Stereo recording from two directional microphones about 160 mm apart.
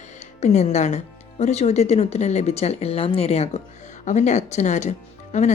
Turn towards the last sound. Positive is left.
turn(degrees=45)  # may be behind; listen again after turning